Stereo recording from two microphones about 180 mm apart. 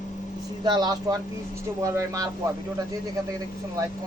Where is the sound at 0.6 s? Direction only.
25° right (ahead or behind).